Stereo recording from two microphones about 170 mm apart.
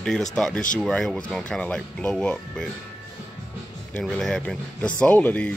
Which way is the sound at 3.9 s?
5° left (ahead or behind).